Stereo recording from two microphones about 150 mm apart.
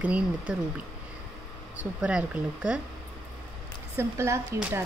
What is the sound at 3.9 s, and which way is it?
Speech, 20° right (ahead or behind).